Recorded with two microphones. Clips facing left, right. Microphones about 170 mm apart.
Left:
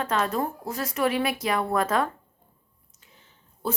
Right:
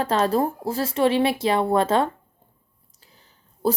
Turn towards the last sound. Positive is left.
turn(degrees=-35)  # may be behind; listen again after turning